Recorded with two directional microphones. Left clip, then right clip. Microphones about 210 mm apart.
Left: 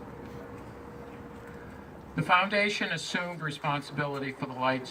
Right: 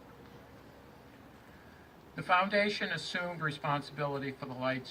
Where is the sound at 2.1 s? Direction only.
20° right (ahead or behind).